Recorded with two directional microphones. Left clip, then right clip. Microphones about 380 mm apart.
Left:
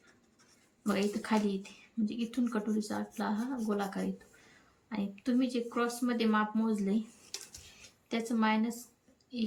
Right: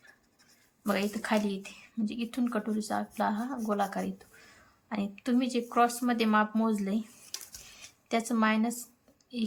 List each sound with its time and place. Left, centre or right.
0.9 s a woman's voice: centre